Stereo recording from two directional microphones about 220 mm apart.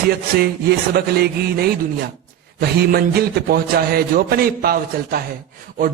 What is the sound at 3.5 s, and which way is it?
A man's voice, 45° right (ahead or behind).